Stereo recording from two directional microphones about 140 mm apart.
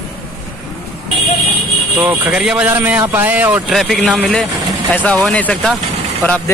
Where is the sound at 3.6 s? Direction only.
Centre (ahead or behind).